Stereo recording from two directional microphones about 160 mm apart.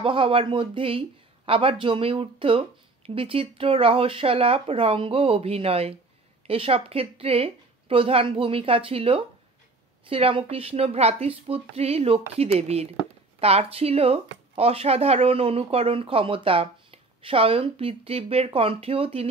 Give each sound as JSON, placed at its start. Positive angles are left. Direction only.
{"t": 0.0, "sound": "speech", "side_deg": -35}